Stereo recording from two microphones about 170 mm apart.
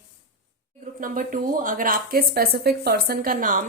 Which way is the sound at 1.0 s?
55° right (ahead or behind).